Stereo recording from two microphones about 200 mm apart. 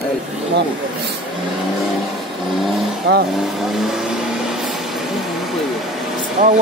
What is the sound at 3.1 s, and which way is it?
Speech, 60° right (ahead or behind).